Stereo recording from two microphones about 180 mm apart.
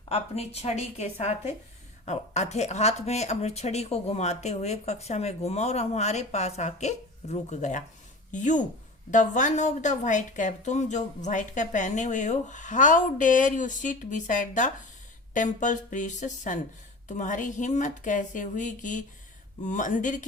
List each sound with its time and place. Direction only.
0.1 s a woman's voice: 35° left (ahead or behind)